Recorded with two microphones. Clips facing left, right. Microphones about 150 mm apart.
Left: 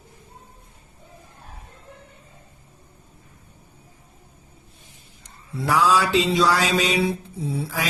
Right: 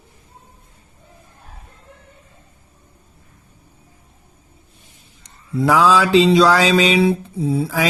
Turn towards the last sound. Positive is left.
turn(degrees=-90)